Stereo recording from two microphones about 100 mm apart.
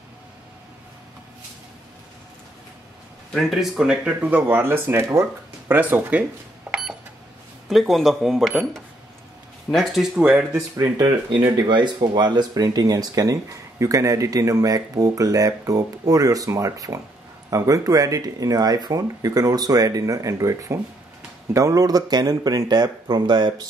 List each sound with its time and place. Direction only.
3.3 s speech: centre (ahead or behind); by 6.2 s 15° right (ahead or behind)
6.7 s cash register: 10° right (ahead or behind)
7.6 s speech: centre (ahead or behind)
9.7 s speech: centre (ahead or behind)
10.1 s speech: 15° right (ahead or behind)
10.8 s speech: 45° right (ahead or behind)